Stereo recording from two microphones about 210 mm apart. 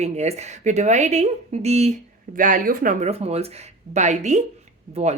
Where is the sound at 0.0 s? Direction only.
30° right (ahead or behind).